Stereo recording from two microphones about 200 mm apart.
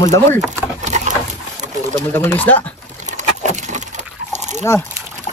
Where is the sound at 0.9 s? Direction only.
35° right (ahead or behind).